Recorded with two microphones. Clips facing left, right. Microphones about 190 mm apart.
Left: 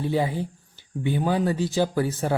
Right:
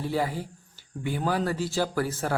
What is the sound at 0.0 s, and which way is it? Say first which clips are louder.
A man's voice: left 4 dB; 20° left (ahead or behind).